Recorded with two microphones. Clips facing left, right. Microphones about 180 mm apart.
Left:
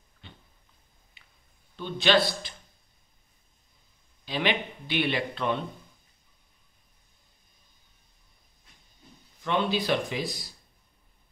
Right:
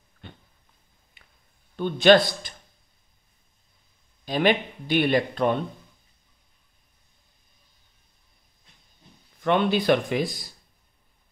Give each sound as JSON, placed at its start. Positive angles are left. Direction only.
{"t": 0.2, "sound": "a sound", "side_deg": -55}
{"t": 1.8, "sound": "speech", "side_deg": -50}
{"t": 4.3, "sound": "speech", "side_deg": -45}
{"t": 9.4, "sound": "speech", "side_deg": -55}